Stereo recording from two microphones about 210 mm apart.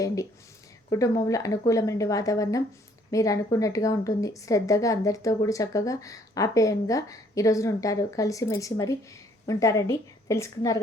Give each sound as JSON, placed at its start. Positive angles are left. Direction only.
{"t": 0.9, "sound": "speech", "side_deg": 15}